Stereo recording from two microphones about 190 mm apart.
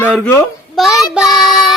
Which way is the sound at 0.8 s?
Centre (ahead or behind).